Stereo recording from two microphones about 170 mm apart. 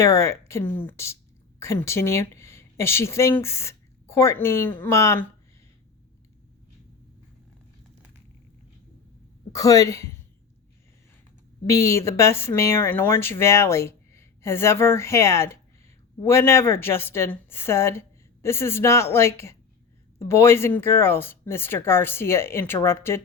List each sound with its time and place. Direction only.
0.0 s speech: 15° left (ahead or behind)
9.5 s speech: 20° left (ahead or behind)
11.6 s speech: 20° left (ahead or behind)